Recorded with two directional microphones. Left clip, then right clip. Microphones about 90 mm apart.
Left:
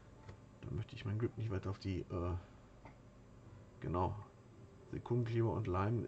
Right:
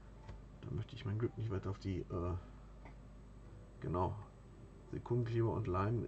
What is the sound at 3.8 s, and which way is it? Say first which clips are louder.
Speech: even; 25° left (ahead or behind).